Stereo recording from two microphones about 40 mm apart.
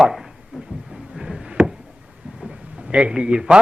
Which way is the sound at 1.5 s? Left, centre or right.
Right.